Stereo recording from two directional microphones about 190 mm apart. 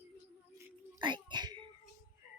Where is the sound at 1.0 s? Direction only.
25° right (ahead or behind).